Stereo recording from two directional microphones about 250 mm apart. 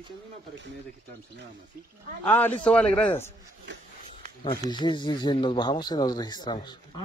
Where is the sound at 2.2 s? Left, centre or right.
Centre.